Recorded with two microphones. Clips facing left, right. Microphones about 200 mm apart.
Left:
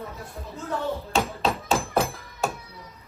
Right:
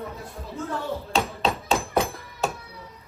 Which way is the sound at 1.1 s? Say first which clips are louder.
Right 1 dB; centre (ahead or behind).